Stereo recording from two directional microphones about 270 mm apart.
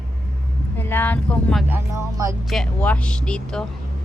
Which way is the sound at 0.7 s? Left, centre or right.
Centre.